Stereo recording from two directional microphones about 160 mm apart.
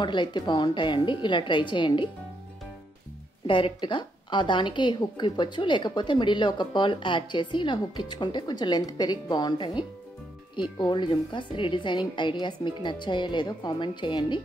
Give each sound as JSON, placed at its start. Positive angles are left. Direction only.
{"t": 0.0, "sound": "a woman's voice", "side_deg": 30}
{"t": 3.4, "sound": "a woman's voice", "side_deg": 30}